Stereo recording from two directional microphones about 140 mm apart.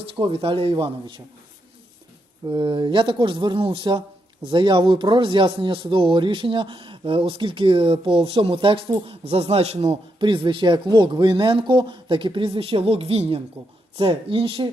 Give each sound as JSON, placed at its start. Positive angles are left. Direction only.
{"t": 0.2, "sound": "a man's voice", "side_deg": -40}
{"t": 2.5, "sound": "a man's voice", "side_deg": -35}
{"t": 10.2, "sound": "a man's voice", "side_deg": -35}